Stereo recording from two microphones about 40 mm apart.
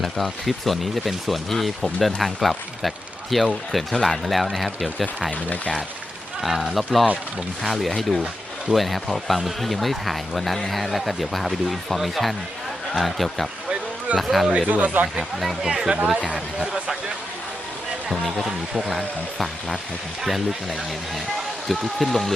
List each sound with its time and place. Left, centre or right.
0.0 s speech: centre
6.4 s speech: centre
14.7 s speech: right
15.2 s speech: centre
15.6 s speech: centre
18.1 s speech: centre
21.7 s speech: centre